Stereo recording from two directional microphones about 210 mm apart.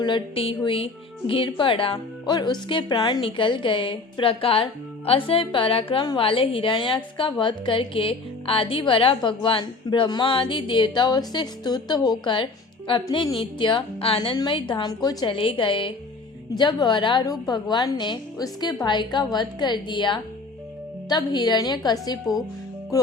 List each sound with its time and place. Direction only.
0.0 s speech: 25° left (ahead or behind)